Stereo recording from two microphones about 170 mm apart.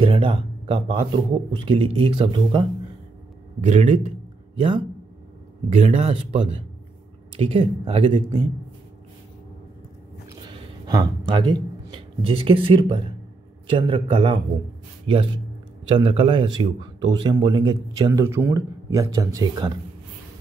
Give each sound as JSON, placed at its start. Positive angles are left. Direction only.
{"t": 0.0, "sound": "speech", "side_deg": -30}
{"t": 3.6, "sound": "speech", "side_deg": -40}
{"t": 10.9, "sound": "a man's voice", "side_deg": -25}